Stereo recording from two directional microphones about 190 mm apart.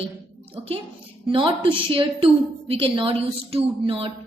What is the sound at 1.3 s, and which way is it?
A woman's voice, 25° right (ahead or behind).